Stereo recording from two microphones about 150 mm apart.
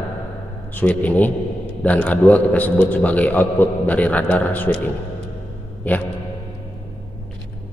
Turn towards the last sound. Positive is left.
turn(degrees=10)  # may be behind; listen again after turning